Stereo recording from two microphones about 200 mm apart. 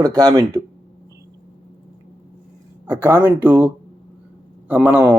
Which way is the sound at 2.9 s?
10° right (ahead or behind).